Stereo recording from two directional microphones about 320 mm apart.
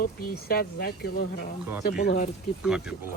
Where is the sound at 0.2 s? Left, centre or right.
Left.